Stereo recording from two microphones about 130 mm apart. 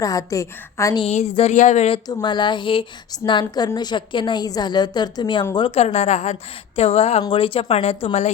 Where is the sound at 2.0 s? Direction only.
30° left (ahead or behind).